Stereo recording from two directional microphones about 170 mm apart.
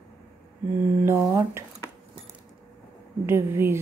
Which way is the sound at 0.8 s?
10° right (ahead or behind).